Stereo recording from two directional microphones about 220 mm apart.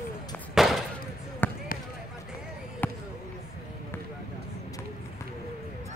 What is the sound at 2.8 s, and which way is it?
Basketball bounce, 10° left (ahead or behind).